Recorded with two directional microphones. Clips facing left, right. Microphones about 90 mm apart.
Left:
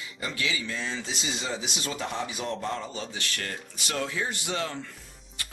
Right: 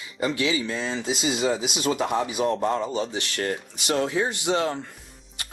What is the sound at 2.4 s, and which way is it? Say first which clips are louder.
Speech: right 9 dB; 40° right (ahead or behind).